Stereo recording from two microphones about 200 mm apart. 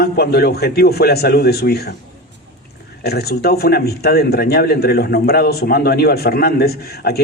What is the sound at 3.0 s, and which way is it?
A man's voice, 50° left (ahead or behind).